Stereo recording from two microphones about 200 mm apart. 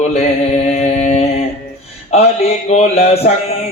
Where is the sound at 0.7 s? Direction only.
35° left (ahead or behind).